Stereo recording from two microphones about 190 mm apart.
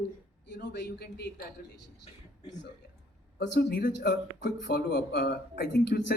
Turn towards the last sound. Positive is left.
turn(degrees=60)  # may be behind; listen again after turning